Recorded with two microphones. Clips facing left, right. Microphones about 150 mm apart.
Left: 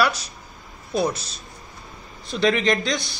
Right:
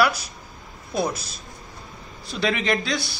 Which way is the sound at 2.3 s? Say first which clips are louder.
Left 3 dB; 10° right (ahead or behind).